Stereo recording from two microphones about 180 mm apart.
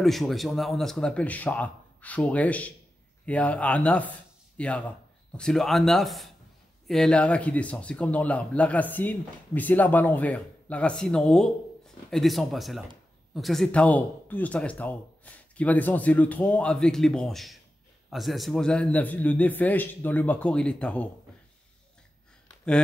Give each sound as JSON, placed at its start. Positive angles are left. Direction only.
{"t": 0.0, "sound": "speech", "side_deg": 0}